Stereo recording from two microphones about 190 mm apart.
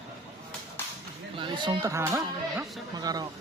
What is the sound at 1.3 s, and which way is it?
Speech, 25° right (ahead or behind).